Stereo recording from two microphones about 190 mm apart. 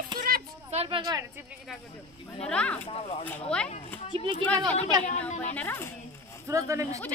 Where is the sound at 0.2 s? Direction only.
40° right (ahead or behind); by 1.2 s 25° right (ahead or behind).